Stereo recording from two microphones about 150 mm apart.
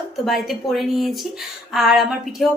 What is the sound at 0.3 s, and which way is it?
A woman's voice, centre (ahead or behind).